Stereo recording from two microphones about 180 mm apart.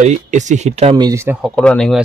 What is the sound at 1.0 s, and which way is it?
Speech, 15° right (ahead or behind).